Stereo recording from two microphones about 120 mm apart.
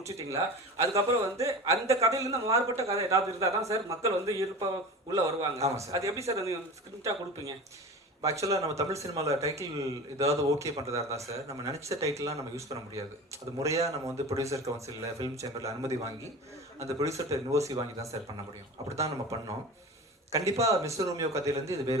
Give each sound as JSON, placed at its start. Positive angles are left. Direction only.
{"t": 0.0, "sound": "a man's voice", "side_deg": -25}
{"t": 8.2, "sound": "a man's voice", "side_deg": -25}